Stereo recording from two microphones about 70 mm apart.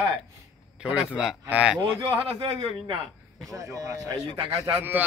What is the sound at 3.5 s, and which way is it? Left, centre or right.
Speech, right.